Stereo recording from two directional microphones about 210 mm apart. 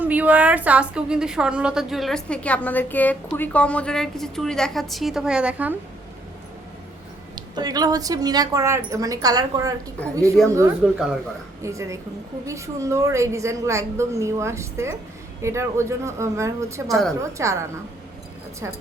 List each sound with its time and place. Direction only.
0.0 s a woman's voice: 5° right (ahead or behind)
7.3 s a woman's voice: 20° right (ahead or behind)
10.4 s a woman's voice: centre (ahead or behind)
11.6 s a woman's voice: 15° right (ahead or behind)
16.9 s a woman's voice: centre (ahead or behind)
17.2 s a woman's voice: 15° right (ahead or behind)